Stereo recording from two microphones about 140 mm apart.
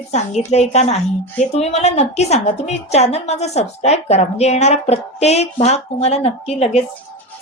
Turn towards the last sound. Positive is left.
turn(degrees=45)  # may be behind; listen again after turning